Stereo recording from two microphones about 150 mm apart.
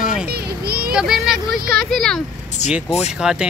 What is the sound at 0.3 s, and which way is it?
Children playing, 90° right.